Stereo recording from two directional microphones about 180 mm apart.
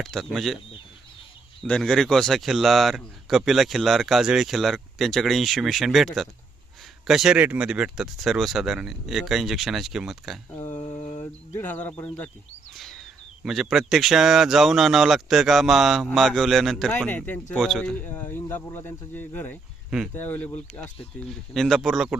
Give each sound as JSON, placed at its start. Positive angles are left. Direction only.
{"t": 0.0, "sound": "speech", "side_deg": 0}
{"t": 1.6, "sound": "speech", "side_deg": 5}
{"t": 10.8, "sound": "mantra", "side_deg": 35}
{"t": 11.5, "sound": "speech", "side_deg": 10}